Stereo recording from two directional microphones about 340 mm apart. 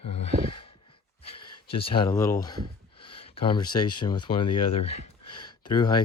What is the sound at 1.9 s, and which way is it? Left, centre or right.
Speech, centre.